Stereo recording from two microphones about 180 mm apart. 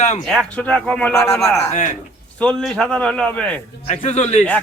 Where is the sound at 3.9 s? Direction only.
35° left (ahead or behind).